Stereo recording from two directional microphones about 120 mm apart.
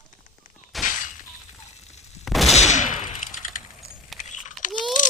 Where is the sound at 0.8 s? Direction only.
90° left.